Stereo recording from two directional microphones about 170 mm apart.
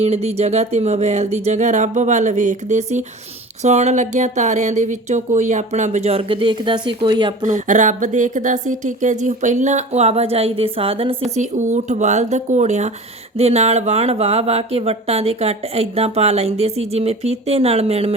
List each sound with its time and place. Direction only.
0.0 s speech: 40° right (ahead or behind)
7.4 s speech: 45° right (ahead or behind)